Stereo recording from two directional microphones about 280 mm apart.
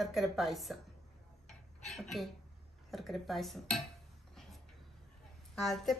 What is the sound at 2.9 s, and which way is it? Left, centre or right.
Speech, centre.